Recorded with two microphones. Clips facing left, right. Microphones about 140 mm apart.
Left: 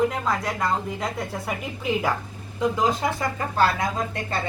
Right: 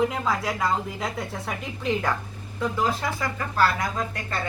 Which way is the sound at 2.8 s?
20° left (ahead or behind).